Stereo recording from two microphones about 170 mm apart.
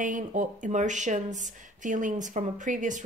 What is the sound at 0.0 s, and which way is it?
Speech, 50° right (ahead or behind).